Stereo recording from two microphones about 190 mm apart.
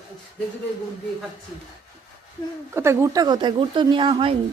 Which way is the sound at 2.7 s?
15° right (ahead or behind).